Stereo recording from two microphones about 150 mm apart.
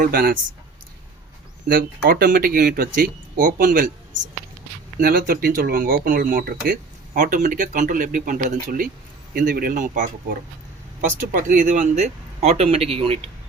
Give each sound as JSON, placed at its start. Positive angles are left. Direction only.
{"t": 0.0, "sound": "speech", "side_deg": -70}
{"t": 1.6, "sound": "speech", "side_deg": -75}
{"t": 4.9, "sound": "speech", "side_deg": -75}